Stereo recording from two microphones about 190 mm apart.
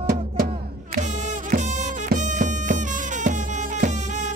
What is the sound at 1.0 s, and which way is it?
Music, 40° right (ahead or behind).